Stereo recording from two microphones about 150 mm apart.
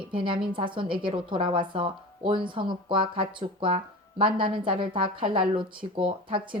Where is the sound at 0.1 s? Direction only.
35° right (ahead or behind).